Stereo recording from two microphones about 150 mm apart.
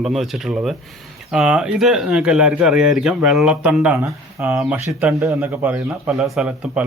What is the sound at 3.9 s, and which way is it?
Speech, 20° right (ahead or behind).